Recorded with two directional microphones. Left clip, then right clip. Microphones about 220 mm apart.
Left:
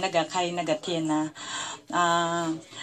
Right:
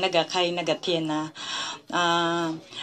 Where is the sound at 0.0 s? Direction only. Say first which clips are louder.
Right 3 dB; 35° right (ahead or behind).